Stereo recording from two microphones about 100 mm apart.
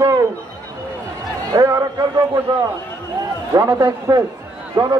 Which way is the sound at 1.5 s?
40° right (ahead or behind).